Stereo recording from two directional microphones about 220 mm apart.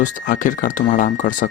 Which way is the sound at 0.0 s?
35° left (ahead or behind).